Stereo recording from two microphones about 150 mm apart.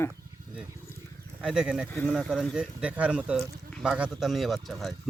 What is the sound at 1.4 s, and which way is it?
Speech, 5° right (ahead or behind).